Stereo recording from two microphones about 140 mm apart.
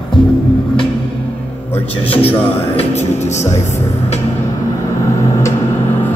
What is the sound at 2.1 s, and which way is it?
Speech, 45° left (ahead or behind).